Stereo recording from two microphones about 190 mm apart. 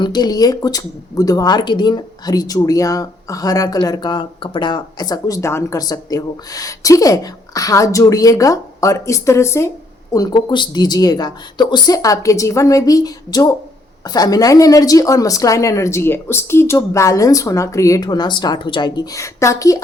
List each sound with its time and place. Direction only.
0.0 s a woman's voice: 20° left (ahead or behind)